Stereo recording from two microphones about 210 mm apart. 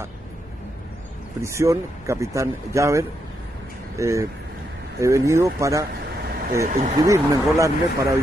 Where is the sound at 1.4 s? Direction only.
15° right (ahead or behind).